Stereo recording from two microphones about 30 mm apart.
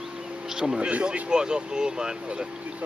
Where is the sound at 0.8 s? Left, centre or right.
Right.